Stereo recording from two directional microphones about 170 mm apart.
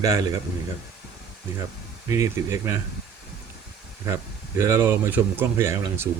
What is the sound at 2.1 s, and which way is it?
Speech, 20° right (ahead or behind).